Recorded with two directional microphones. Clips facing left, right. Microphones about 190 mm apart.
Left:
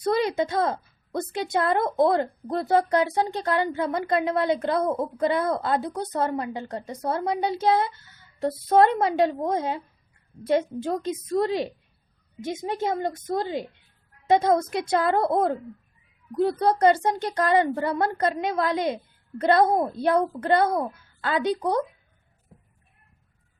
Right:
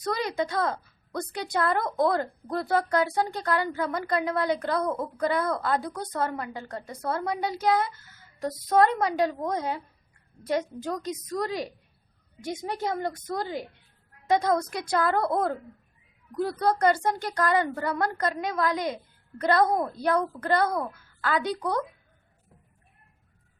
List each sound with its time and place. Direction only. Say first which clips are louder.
0.0 s a woman's voice: left 5 dB; 25° left (ahead or behind)